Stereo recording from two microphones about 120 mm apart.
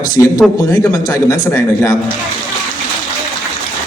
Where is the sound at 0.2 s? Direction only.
25° left (ahead or behind).